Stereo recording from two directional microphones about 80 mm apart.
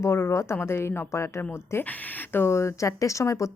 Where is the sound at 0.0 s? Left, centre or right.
Left.